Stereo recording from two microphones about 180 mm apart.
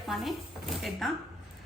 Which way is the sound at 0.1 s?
Centre (ahead or behind).